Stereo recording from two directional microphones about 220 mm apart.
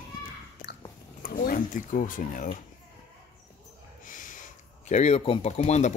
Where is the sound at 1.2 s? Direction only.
40° left (ahead or behind).